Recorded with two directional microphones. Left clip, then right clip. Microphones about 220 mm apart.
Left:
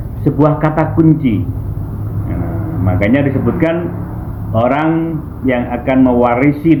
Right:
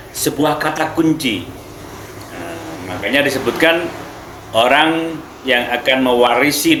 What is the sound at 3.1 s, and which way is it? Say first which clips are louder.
Speech: right 3 dB; 20° right (ahead or behind).